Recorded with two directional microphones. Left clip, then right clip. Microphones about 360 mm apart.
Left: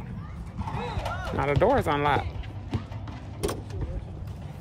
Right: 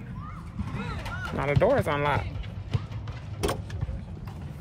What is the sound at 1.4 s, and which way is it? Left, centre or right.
Speech, centre.